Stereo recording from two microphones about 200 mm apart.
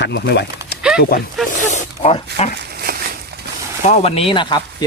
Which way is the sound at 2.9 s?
50° right (ahead or behind).